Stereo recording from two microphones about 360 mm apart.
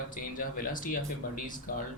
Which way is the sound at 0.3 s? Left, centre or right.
Left.